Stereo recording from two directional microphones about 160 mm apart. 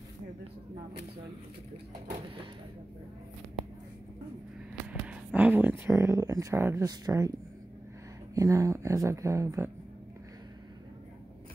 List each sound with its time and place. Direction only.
4.8 s speech: 10° right (ahead or behind)
8.4 s speech: 20° right (ahead or behind)